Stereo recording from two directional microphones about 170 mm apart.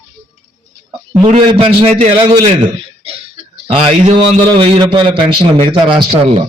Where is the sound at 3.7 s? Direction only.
35° right (ahead or behind).